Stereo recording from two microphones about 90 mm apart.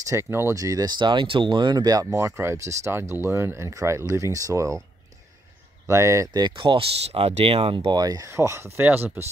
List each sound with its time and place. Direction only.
0.0 s speech: 30° right (ahead or behind)
0.6 s speech: 40° right (ahead or behind)
2.0 s speech: 30° right (ahead or behind)
5.9 s speech: 35° right (ahead or behind)
6.3 s speech: 60° right (ahead or behind); by 7.9 s 85° right
7.9 s speech: 45° right (ahead or behind)
8.3 s speech: 30° right (ahead or behind)
8.8 s speech: 20° right (ahead or behind)